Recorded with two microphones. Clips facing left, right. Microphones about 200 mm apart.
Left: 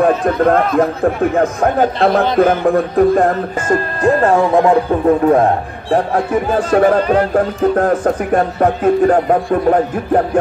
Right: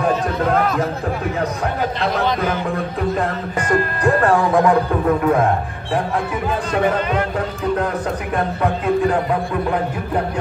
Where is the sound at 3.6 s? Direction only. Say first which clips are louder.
Left 3 dB; 25° left (ahead or behind).